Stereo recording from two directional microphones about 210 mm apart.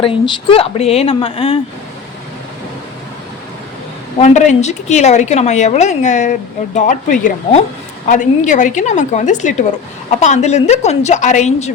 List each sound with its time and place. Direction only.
0.0 s speech: 25° left (ahead or behind)
4.2 s a woman's voice: 35° left (ahead or behind)